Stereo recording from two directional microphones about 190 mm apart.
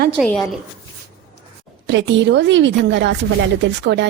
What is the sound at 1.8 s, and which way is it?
A woman's voice, 70° right (ahead or behind).